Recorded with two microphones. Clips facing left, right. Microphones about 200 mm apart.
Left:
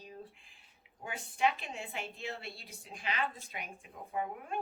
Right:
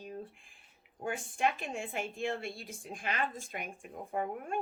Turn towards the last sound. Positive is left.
turn(degrees=-50)  # may be behind; listen again after turning